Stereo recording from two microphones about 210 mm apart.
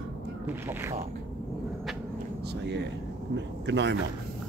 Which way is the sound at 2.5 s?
55° right (ahead or behind).